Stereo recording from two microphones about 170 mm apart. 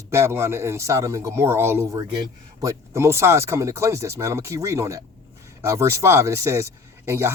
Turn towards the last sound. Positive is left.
turn(degrees=-15)  # may be behind; listen again after turning